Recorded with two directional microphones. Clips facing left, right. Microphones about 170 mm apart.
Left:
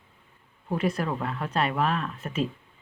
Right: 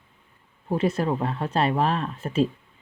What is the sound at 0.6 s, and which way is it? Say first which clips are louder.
Speech: right 4 dB; 25° right (ahead or behind).